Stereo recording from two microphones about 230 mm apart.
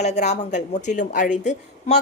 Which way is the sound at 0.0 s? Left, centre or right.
Left.